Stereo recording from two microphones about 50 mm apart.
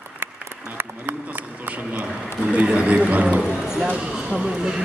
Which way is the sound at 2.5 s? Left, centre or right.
Right.